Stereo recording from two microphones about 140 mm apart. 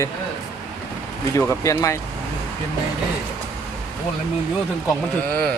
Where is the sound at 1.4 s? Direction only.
20° left (ahead or behind).